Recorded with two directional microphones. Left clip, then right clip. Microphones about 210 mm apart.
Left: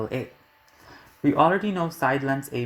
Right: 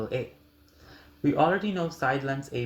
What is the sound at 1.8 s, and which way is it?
Speech, 30° left (ahead or behind).